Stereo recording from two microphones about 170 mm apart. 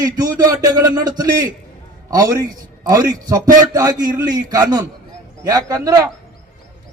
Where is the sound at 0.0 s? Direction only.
20° right (ahead or behind).